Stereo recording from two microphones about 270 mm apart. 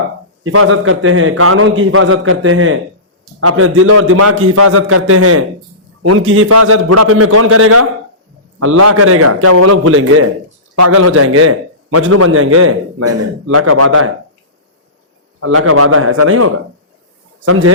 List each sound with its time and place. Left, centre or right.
0.4 s a man's voice: right
10.8 s a man's voice: right
11.1 s a man's voice: right
15.4 s a man's voice: right